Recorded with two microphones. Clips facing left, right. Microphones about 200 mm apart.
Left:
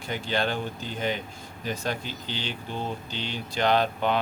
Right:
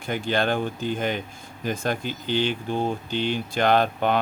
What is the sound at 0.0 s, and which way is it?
Speech, 50° right (ahead or behind).